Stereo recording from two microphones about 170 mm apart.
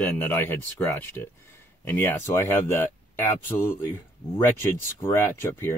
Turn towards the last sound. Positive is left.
turn(degrees=15)  # may be behind; listen again after turning